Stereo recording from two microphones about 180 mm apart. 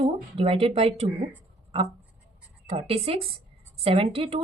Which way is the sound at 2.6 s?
35° right (ahead or behind).